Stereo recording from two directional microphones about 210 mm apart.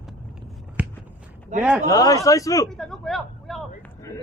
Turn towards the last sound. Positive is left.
turn(degrees=0)  # may be behind; listen again after turning